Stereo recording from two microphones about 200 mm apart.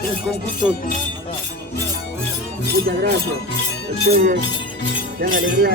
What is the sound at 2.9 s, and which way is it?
Speech, 55° right (ahead or behind).